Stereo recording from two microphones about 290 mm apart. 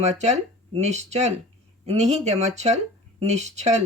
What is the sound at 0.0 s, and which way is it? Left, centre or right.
Speech, right.